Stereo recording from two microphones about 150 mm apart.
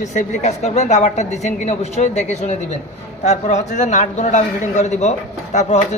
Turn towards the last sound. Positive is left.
turn(degrees=50)  # may be behind; listen again after turning